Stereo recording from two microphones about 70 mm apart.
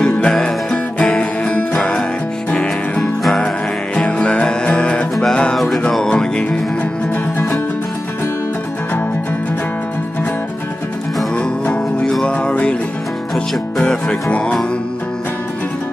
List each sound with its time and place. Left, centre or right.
0.0 s music: centre
3.0 s music: centre
3.9 s music: centre
7.3 s music: left
11.3 s music: centre